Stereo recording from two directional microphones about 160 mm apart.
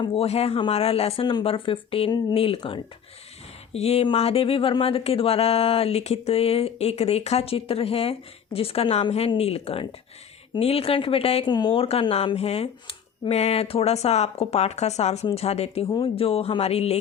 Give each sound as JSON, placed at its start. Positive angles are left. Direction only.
{"t": 0.0, "sound": "speech", "side_deg": 35}